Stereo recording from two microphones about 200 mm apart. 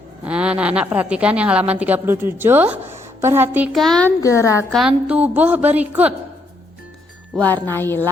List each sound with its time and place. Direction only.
0.3 s a woman's voice: 5° right (ahead or behind)
4.2 s speech: 15° left (ahead or behind)
4.7 s a woman's voice: 5° right (ahead or behind)
7.3 s speech: 10° left (ahead or behind)